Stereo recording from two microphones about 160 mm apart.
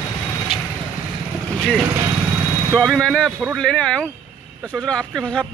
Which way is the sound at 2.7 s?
5° left (ahead or behind).